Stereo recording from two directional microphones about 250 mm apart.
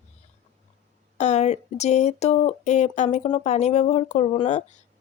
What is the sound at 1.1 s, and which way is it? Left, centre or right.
Speech, left.